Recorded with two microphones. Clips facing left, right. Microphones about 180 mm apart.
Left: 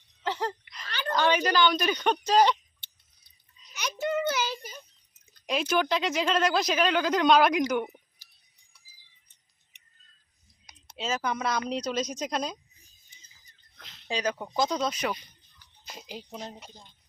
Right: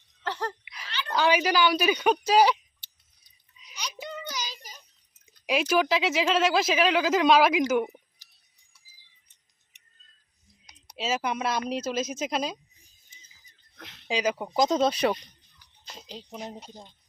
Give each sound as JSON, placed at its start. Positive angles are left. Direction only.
{"t": 0.2, "sound": "laughter", "side_deg": 10}
{"t": 0.6, "sound": "a sound", "side_deg": -10}
{"t": 1.1, "sound": "speech", "side_deg": -10}
{"t": 4.1, "sound": "child singing", "side_deg": 60}
{"t": 5.3, "sound": "speech", "side_deg": -5}
{"t": 10.8, "sound": "a sound", "side_deg": -10}
{"t": 11.3, "sound": "speech", "side_deg": -5}
{"t": 13.7, "sound": "a sound", "side_deg": -55}
{"t": 14.1, "sound": "speech", "side_deg": -10}
{"t": 14.8, "sound": "speech", "side_deg": -30}
{"t": 15.8, "sound": "speech", "side_deg": 5}
{"t": 16.3, "sound": "speech", "side_deg": -10}